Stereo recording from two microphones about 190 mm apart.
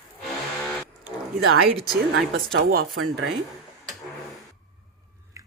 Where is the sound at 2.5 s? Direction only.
55° right (ahead or behind).